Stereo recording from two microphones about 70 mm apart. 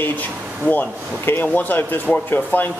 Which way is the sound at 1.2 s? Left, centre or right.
Left.